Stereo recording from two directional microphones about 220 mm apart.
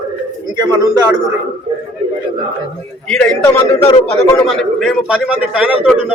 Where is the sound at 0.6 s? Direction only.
20° right (ahead or behind).